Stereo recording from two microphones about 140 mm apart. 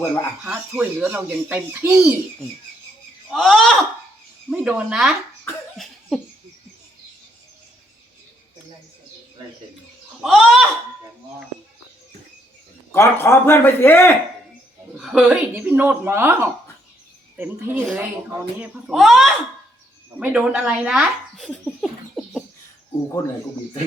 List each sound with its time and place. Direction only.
0.4 s speech: 10° right (ahead or behind)
3.2 s speech: 5° left (ahead or behind)
4.4 s speech: 5° right (ahead or behind)
5.7 s cough: centre (ahead or behind)
10.2 s speech: centre (ahead or behind)
12.9 s a man's voice: 20° left (ahead or behind)
14.9 s speech: 5° right (ahead or behind)
17.7 s speech: 5° right (ahead or behind)